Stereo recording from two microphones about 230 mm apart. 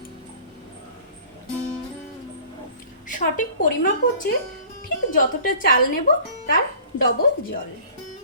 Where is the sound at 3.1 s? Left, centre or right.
Left.